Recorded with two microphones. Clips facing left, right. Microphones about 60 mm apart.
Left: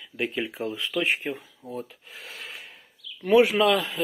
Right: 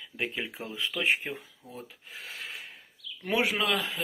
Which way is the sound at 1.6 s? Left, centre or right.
Left.